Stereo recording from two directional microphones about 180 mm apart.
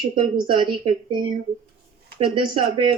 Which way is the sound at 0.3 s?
25° right (ahead or behind).